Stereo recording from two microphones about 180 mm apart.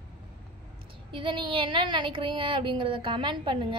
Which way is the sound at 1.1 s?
25° right (ahead or behind).